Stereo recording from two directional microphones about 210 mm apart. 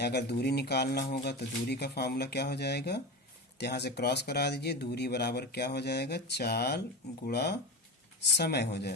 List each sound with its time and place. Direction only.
0.0 s speech: 50° left (ahead or behind)